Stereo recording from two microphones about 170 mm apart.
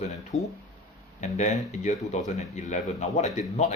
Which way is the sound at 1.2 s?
40° left (ahead or behind).